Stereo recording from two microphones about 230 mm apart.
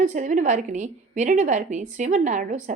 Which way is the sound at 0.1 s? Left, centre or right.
Right.